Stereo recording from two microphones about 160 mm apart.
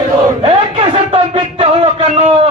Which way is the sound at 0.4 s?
35° right (ahead or behind).